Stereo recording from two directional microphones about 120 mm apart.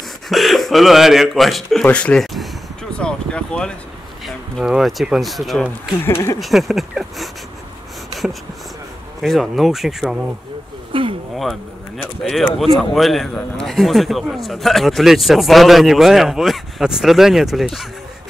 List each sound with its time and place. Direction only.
0.3 s a man's voice: centre (ahead or behind)
4.6 s a man's voice: centre (ahead or behind)
6.0 s speech: 20° left (ahead or behind)
6.4 s a man's voice: centre (ahead or behind)
9.2 s a man's voice: centre (ahead or behind)
10.9 s a sound: 45° right (ahead or behind)
12.0 s a man's voice: centre (ahead or behind)